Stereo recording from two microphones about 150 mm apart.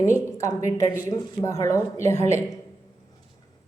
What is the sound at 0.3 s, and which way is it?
Speech, 20° left (ahead or behind).